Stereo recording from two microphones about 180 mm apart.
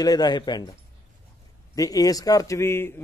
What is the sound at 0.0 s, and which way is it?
Speech, 20° left (ahead or behind).